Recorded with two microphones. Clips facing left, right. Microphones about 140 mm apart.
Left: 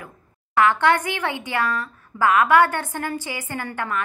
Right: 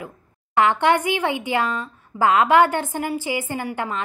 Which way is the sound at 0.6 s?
20° right (ahead or behind).